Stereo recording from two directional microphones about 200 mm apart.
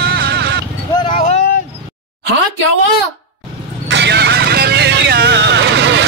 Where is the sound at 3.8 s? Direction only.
60° right (ahead or behind).